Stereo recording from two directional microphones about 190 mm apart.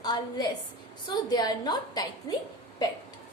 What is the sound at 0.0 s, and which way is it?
A woman's voice, 20° left (ahead or behind).